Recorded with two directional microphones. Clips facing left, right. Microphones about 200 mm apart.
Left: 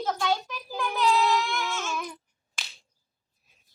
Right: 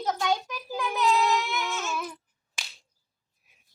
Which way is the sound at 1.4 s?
Centre (ahead or behind).